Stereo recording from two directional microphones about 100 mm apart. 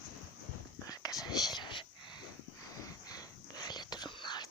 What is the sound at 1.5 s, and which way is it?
Whispering, 50° left (ahead or behind).